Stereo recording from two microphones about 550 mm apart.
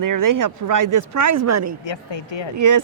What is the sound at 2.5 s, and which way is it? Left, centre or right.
Speech, right.